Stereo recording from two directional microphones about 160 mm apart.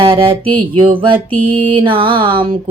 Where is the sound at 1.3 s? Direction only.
10° left (ahead or behind).